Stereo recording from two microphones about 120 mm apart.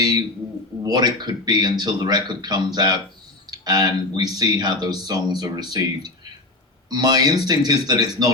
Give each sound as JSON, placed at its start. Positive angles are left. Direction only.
{"t": 0.8, "sound": "speech", "side_deg": -35}